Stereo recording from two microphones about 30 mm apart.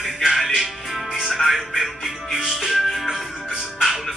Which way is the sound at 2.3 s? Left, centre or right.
Centre.